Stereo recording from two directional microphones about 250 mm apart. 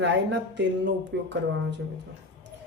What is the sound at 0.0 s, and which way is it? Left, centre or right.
Speech, right.